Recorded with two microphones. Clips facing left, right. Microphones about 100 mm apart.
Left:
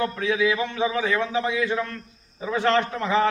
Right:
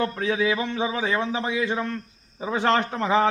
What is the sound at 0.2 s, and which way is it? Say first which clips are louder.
A man's voice: left 1 dB; 35° right (ahead or behind).